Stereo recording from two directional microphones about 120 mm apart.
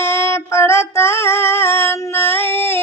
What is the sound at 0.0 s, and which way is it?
Female singing, 20° left (ahead or behind).